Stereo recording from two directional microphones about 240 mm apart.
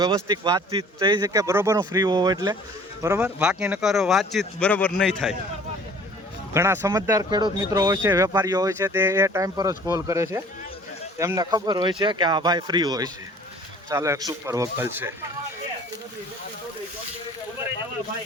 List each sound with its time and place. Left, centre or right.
0.0 s speech: centre
6.5 s speech: centre